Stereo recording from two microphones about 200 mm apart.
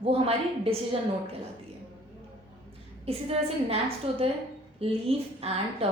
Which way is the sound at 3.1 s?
30° right (ahead or behind).